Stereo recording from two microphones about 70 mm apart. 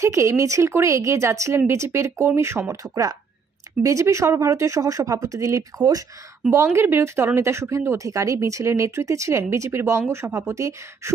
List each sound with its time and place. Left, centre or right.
0.0 s speech: right
6.5 s speech: right